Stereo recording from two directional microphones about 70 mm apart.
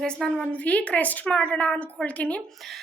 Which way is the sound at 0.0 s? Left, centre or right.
Centre.